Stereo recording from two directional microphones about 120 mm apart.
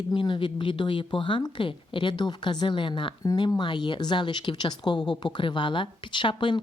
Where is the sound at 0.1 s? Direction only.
40° left (ahead or behind).